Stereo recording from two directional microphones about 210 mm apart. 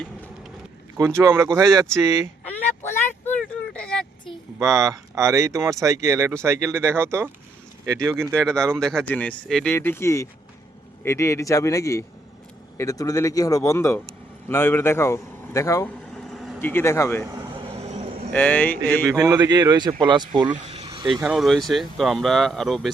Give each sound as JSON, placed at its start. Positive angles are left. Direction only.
{"t": 0.9, "sound": "speech", "side_deg": -15}
{"t": 1.9, "sound": "a sound", "side_deg": 5}
{"t": 4.8, "sound": "speech", "side_deg": -15}
{"t": 8.3, "sound": "a man's voice", "side_deg": 5}
{"t": 16.0, "sound": "a sound", "side_deg": 0}
{"t": 16.6, "sound": "a man's voice", "side_deg": 10}
{"t": 17.2, "sound": "vehicle", "side_deg": -15}
{"t": 18.3, "sound": "a man's voice", "side_deg": 5}
{"t": 19.1, "sound": "speech", "side_deg": -15}
{"t": 20.8, "sound": "vehicle", "side_deg": -20}
{"t": 21.2, "sound": "speech", "side_deg": -5}